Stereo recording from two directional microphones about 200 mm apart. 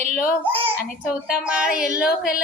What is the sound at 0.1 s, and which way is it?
Speech, 45° left (ahead or behind).